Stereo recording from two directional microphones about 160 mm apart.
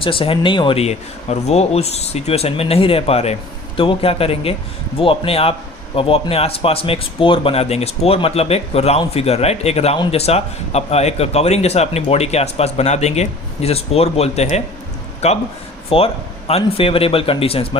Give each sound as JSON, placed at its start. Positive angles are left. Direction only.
{"t": 0.0, "sound": "a man's voice", "side_deg": 35}